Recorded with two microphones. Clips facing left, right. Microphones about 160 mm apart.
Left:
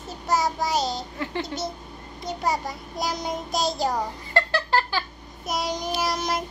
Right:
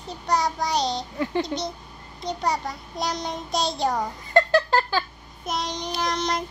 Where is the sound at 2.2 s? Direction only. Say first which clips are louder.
Right 1 dB; centre (ahead or behind).